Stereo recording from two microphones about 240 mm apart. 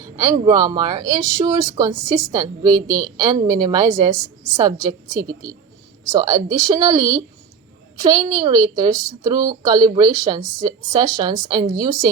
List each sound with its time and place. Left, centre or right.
0.0 s a woman's voice: centre